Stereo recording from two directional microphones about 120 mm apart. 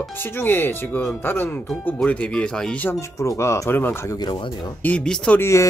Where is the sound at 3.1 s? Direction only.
25° left (ahead or behind); by 5.4 s 10° left (ahead or behind).